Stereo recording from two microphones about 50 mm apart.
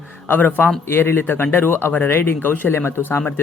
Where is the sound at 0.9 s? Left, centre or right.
Left.